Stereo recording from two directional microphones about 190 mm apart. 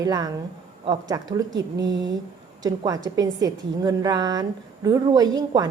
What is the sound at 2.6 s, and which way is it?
A woman's voice, 20° right (ahead or behind).